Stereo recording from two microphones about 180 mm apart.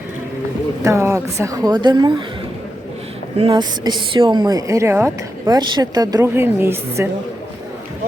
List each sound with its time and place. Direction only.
0.8 s speech: 15° right (ahead or behind)
3.3 s speech: 30° right (ahead or behind); by 7.1 s 15° right (ahead or behind)